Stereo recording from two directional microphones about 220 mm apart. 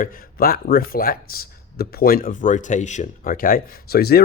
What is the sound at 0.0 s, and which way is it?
Speech, 45° left (ahead or behind).